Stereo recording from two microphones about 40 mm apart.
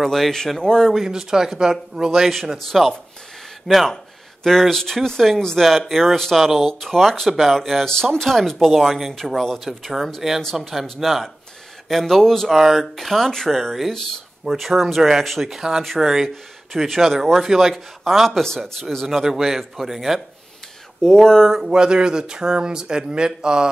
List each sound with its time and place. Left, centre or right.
0.0 s speech: centre
1.0 s speech: centre
2.1 s speech: centre
3.9 s speech: centre
7.2 s speech: centre
7.5 s speech: centre
11.9 s speech: centre
12.4 s speech: centre
15.5 s speech: centre
21.0 s speech: centre
21.6 s speech: right